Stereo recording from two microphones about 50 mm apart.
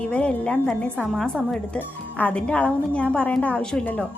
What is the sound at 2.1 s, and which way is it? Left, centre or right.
Speech, left.